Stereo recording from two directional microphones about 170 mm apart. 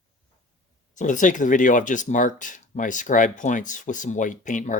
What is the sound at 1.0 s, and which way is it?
Speech, 50° left (ahead or behind).